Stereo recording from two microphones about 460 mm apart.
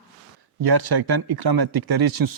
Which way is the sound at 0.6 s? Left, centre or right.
Right.